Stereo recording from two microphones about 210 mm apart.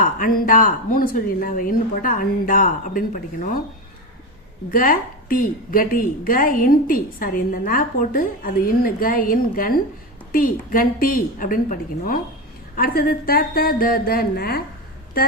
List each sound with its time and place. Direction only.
0.0 s a woman's voice: 45° left (ahead or behind)
4.7 s a woman's voice: 40° left (ahead or behind)